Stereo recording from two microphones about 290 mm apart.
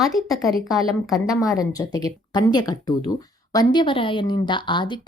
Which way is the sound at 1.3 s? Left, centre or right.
Centre.